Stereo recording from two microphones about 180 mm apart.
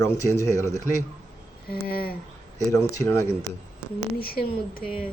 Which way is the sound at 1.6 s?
55° left (ahead or behind).